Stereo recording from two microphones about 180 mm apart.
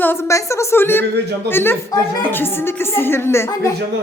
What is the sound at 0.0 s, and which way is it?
A child's voice, 10° left (ahead or behind).